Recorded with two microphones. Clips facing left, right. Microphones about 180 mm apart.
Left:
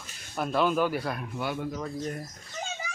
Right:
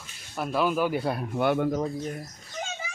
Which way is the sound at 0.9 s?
30° right (ahead or behind).